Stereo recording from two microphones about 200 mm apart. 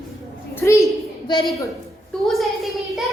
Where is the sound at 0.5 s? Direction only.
15° left (ahead or behind).